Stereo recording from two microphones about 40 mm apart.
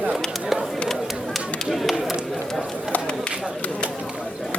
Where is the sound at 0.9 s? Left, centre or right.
Centre.